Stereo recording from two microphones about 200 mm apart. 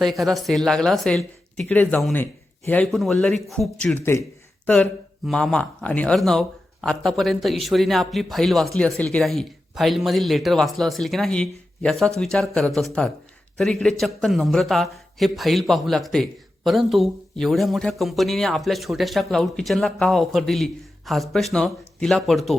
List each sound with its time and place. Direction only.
0.0 s a man's voice: centre (ahead or behind)
4.1 s speech: 15° left (ahead or behind)
4.6 s a man's voice: 5° left (ahead or behind)